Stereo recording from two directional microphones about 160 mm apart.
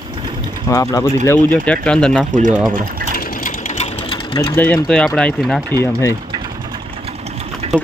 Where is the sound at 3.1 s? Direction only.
55° left (ahead or behind).